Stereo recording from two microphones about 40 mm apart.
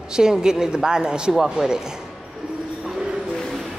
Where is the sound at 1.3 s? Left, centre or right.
Centre.